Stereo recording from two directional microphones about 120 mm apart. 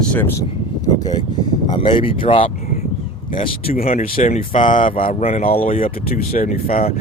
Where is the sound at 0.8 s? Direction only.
30° left (ahead or behind).